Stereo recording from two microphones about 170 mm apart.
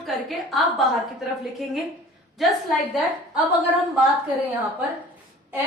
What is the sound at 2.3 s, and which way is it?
Speech, centre (ahead or behind).